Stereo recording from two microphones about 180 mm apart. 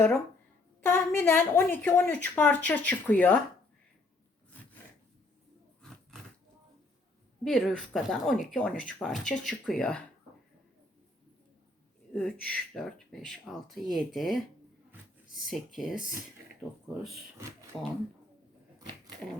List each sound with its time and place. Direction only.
0.8 s a woman's voice: 10° left (ahead or behind)
7.4 s speech: centre (ahead or behind)
12.1 s speech: 5° left (ahead or behind)
15.4 s speech: centre (ahead or behind)
17.7 s a woman's voice: 10° left (ahead or behind)